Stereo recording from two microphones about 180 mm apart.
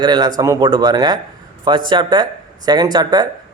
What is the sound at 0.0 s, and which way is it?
A man's voice, 25° right (ahead or behind).